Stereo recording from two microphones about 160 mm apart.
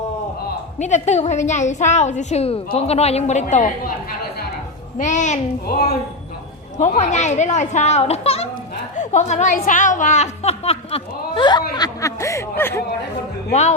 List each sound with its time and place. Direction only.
0.8 s a woman's voice: 45° left (ahead or behind)
4.9 s a woman's voice: 50° left (ahead or behind)
5.6 s speech: 80° left
6.7 s a woman's voice: 50° left (ahead or behind); by 12.8 s 15° left (ahead or behind)
13.5 s speech: 40° left (ahead or behind)